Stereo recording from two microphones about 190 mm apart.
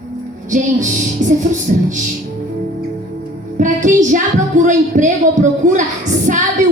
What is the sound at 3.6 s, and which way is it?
Speech, 40° right (ahead or behind).